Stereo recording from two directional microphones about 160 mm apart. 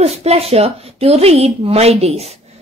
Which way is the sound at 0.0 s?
40° right (ahead or behind).